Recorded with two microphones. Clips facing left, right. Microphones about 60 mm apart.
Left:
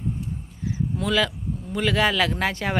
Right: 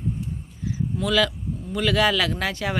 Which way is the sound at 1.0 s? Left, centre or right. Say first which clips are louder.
Right 2 dB; left.